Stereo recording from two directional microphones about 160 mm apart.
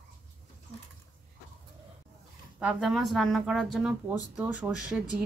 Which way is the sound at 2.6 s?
5° right (ahead or behind).